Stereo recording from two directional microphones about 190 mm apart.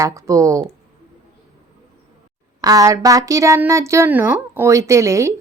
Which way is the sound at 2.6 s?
20° right (ahead or behind).